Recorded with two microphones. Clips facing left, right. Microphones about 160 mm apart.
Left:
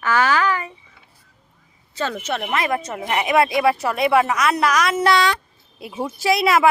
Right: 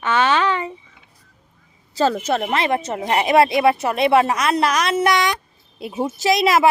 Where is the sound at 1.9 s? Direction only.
35° right (ahead or behind); by 6.4 s 20° right (ahead or behind).